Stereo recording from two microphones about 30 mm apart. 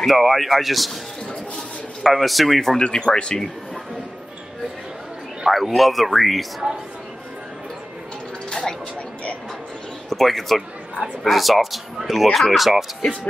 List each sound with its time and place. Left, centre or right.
0.0 s speech: centre
2.0 s speech: centre
2.8 s speech: left
5.4 s a sound: centre
5.8 s speech: centre
6.6 s a woman's voice: right
8.5 s a sound: centre
10.0 s speech: centre
12.3 s speech: centre